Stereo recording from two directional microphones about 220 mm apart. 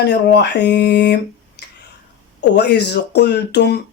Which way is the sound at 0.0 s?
50° left (ahead or behind).